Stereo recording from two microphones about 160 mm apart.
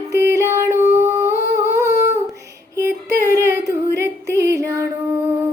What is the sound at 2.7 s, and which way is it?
Singing, 15° right (ahead or behind).